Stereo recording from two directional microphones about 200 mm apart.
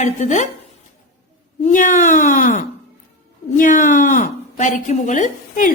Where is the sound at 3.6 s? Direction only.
40° left (ahead or behind).